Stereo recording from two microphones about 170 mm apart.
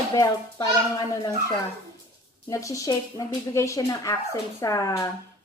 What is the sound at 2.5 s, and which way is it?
Speech, 20° left (ahead or behind).